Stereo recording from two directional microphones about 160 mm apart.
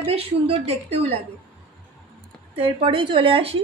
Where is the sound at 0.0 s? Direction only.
40° right (ahead or behind).